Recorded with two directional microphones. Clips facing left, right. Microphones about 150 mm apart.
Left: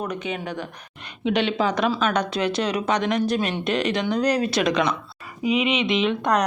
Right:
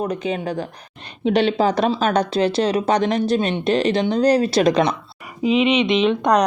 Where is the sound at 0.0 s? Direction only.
35° right (ahead or behind).